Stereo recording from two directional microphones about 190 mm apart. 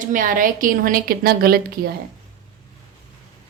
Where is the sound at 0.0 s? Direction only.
45° right (ahead or behind).